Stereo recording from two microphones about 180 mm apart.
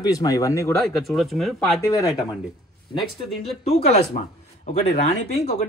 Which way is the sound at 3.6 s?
35° left (ahead or behind).